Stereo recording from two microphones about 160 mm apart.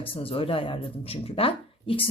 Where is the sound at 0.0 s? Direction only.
35° left (ahead or behind).